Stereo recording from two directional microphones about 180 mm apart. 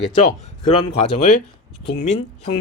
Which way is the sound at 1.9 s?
40° left (ahead or behind).